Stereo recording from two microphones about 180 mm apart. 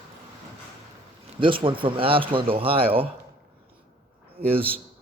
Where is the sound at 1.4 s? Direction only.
30° right (ahead or behind).